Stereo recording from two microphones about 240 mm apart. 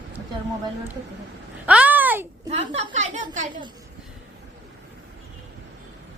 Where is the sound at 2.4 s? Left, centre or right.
Right.